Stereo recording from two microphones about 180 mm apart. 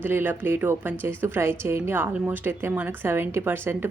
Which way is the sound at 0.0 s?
10° right (ahead or behind).